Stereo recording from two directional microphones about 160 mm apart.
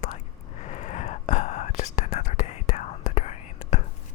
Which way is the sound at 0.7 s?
50° left (ahead or behind).